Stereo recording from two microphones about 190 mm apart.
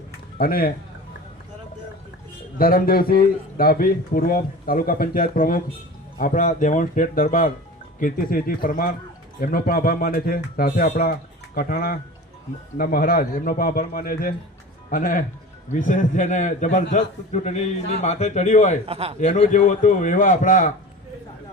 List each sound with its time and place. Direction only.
0.3 s speech: 50° left (ahead or behind)
2.6 s a man's voice: 50° left (ahead or behind)
18.9 s a man's voice: 30° right (ahead or behind)
19.2 s a man's voice: 35° left (ahead or behind)